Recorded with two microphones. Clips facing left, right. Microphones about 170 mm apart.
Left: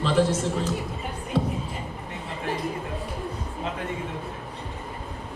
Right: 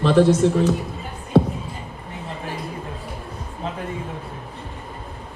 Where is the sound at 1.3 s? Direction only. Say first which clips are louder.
Right 9 dB; 65° right (ahead or behind).